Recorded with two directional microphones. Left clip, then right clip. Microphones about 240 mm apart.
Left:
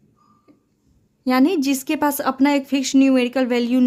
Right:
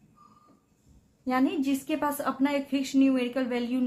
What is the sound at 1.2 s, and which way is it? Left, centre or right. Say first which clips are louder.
A woman's voice: left 9 dB; left.